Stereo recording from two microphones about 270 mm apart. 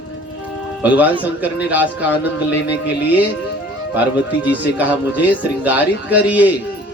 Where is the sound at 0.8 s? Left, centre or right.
Centre.